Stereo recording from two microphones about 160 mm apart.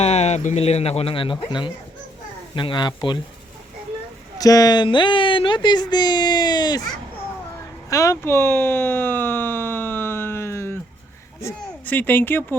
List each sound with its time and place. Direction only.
0.0 s speech: 40° left (ahead or behind)
4.4 s speech: 20° left (ahead or behind)
7.9 s a sound: 20° left (ahead or behind)
11.3 s speech: 15° left (ahead or behind)